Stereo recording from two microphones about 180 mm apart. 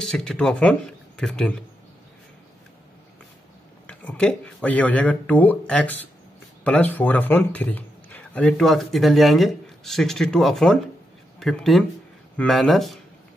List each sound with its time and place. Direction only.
0.0 s speech: 5° left (ahead or behind)
3.8 s a man's voice: 10° left (ahead or behind)